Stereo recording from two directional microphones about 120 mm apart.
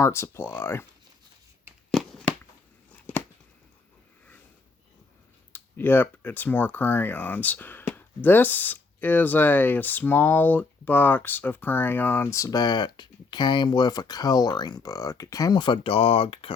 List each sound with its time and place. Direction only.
0.0 s speech: 25° left (ahead or behind)
1.9 s a sound: centre (ahead or behind)
5.5 s speech: 15° left (ahead or behind); by 16.5 s 50° left (ahead or behind)